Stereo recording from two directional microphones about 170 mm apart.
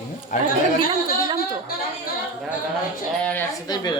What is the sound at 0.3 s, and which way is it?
Speech, 55° left (ahead or behind).